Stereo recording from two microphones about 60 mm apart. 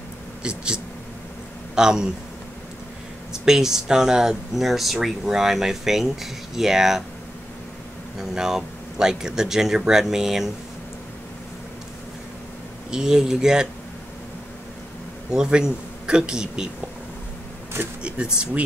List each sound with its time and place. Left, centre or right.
0.4 s speech: centre
1.8 s speech: centre
3.4 s speech: centre
8.2 s speech: centre
12.9 s speech: centre
15.3 s speech: centre
18.0 s speech: centre